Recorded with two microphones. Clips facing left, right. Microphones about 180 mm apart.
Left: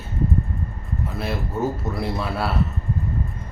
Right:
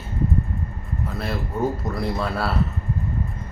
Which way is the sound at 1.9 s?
5° left (ahead or behind).